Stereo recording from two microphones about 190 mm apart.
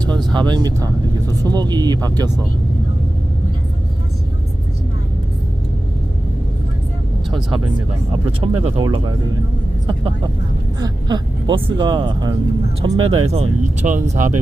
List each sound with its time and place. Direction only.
0.0 s vehicle: 5° left (ahead or behind)
0.3 s speech: 20° right (ahead or behind)
8.2 s speech: 30° right (ahead or behind)
10.8 s speech: 20° right (ahead or behind); by 14.3 s 40° right (ahead or behind)